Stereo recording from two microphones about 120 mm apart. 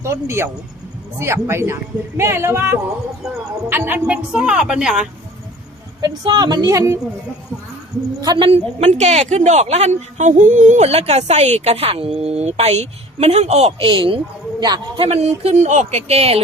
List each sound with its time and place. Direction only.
0.0 s speech: 25° right (ahead or behind); by 5.0 s 5° right (ahead or behind)
6.0 s speech: 35° right (ahead or behind)
8.2 s speech: 35° right (ahead or behind)
8.4 s speech: 60° right (ahead or behind)
13.8 s speech: 45° right (ahead or behind)
15.0 s speech: 65° right (ahead or behind)